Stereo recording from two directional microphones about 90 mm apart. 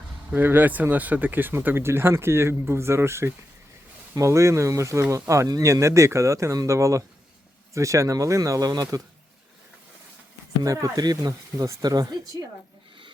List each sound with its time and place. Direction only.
0.3 s speech: 20° right (ahead or behind); by 9.0 s 45° right (ahead or behind)
10.6 s speech: 40° right (ahead or behind)